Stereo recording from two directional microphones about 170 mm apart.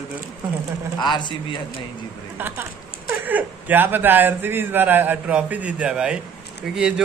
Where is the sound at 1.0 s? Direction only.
25° left (ahead or behind).